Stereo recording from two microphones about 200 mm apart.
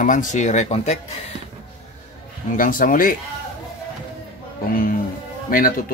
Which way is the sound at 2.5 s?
45° left (ahead or behind).